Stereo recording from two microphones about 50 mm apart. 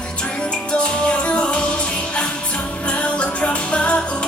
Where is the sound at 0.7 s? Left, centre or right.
Left.